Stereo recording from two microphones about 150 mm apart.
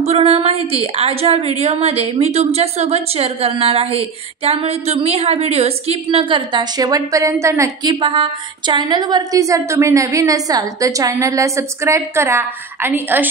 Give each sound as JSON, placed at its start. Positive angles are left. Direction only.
{"t": 0.0, "sound": "a woman's voice", "side_deg": -45}